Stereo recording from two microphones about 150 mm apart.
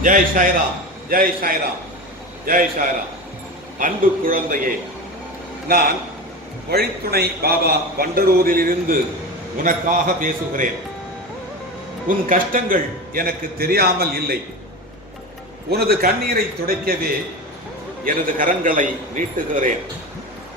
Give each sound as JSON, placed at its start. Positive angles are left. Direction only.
{"t": 0.0, "sound": "a man's voice", "side_deg": -60}
{"t": 1.1, "sound": "a man's voice", "side_deg": -75}
{"t": 5.6, "sound": "a man's voice", "side_deg": -90}
{"t": 12.0, "sound": "a man's voice", "side_deg": -65}
{"t": 15.7, "sound": "a man's voice", "side_deg": -90}
{"t": 18.0, "sound": "a man's voice", "side_deg": -65}